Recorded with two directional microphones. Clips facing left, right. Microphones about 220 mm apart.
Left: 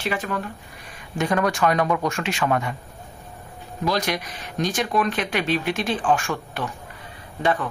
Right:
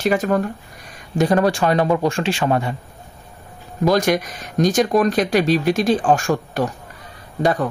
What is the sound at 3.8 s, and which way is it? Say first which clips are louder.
Speech: right 8 dB; 45° right (ahead or behind).